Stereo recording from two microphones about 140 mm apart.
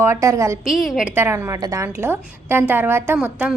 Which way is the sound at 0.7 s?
Centre (ahead or behind).